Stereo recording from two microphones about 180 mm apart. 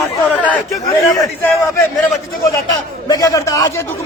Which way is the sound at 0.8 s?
20° left (ahead or behind).